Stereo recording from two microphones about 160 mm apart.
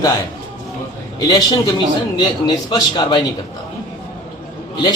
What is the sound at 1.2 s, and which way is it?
A man's voice, 25° left (ahead or behind).